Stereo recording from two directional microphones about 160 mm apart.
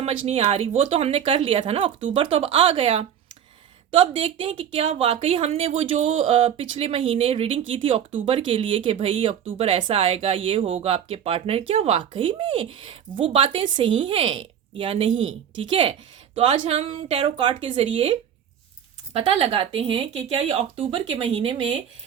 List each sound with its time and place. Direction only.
0.0 s a woman's voice: 40° right (ahead or behind)